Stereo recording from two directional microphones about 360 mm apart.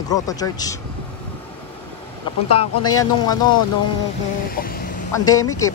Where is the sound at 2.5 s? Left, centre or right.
Centre.